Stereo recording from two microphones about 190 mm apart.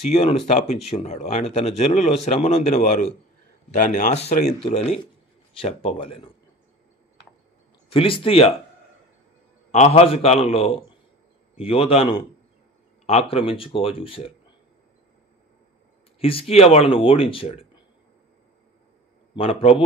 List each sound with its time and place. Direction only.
0.1 s a man's voice: 30° left (ahead or behind)
7.9 s speech: 30° left (ahead or behind)
9.7 s a man's voice: 30° left (ahead or behind)
16.2 s speech: 30° left (ahead or behind)
19.3 s speech: 30° left (ahead or behind)